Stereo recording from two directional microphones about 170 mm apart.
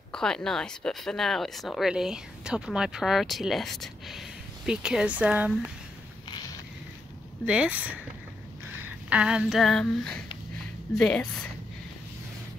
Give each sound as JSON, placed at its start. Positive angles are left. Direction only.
{"t": 0.1, "sound": "speech", "side_deg": 5}
{"t": 7.4, "sound": "speech", "side_deg": -5}
{"t": 8.8, "sound": "a sound", "side_deg": -5}
{"t": 11.0, "sound": "speech", "side_deg": 5}